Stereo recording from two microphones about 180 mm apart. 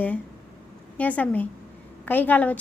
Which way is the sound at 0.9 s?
10° left (ahead or behind).